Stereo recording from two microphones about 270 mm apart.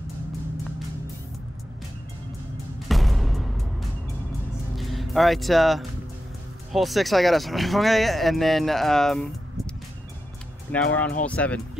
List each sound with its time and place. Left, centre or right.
2.9 s music: centre
4.7 s speech: centre
10.7 s speech: centre